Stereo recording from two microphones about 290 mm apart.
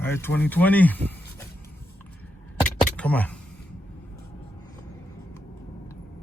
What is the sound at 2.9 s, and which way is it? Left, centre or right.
Computer keyboard, centre.